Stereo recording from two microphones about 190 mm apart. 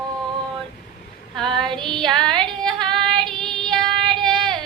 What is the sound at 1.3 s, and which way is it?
Female singing, 5° left (ahead or behind).